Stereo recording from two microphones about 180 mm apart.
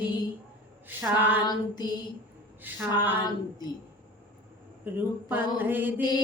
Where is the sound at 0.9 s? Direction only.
10° right (ahead or behind).